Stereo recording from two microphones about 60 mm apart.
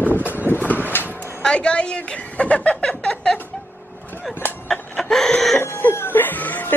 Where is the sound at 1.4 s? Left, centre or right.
Centre.